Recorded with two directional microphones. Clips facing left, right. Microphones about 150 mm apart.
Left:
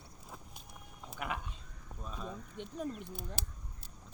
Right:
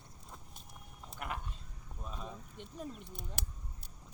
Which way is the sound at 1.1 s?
Centre (ahead or behind).